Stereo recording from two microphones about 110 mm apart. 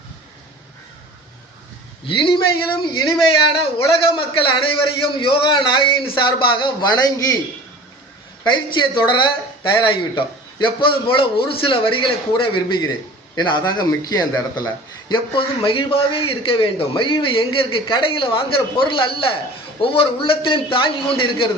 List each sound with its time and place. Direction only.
2.0 s a man's voice: 50° left (ahead or behind)
4.0 s a man's voice: 50° left (ahead or behind); by 7.3 s 35° left (ahead or behind)
8.4 s a man's voice: 45° left (ahead or behind)
15.1 s a man's voice: 50° left (ahead or behind)